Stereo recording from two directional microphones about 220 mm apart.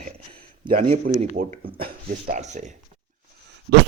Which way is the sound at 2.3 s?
30° right (ahead or behind).